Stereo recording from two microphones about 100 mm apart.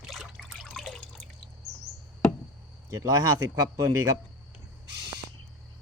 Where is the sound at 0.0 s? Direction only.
Centre (ahead or behind).